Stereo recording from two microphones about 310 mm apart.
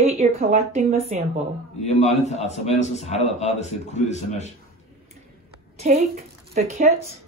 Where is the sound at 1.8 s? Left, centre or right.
Left.